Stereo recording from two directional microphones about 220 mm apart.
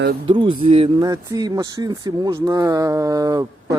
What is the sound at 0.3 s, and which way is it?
Speech, 25° right (ahead or behind).